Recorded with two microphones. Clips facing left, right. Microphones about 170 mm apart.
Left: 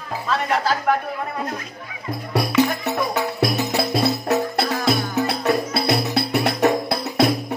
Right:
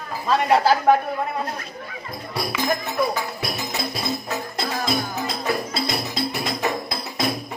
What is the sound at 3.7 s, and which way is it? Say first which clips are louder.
Music: left 7 dB; 70° left (ahead or behind).